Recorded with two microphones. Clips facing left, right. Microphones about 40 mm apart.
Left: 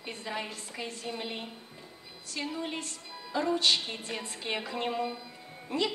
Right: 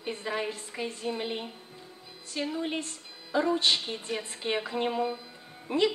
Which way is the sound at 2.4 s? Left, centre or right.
Centre.